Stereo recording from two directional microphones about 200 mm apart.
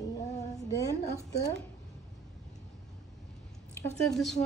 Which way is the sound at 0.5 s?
15° left (ahead or behind).